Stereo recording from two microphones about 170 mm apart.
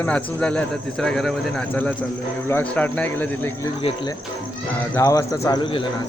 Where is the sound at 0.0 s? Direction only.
5° left (ahead or behind).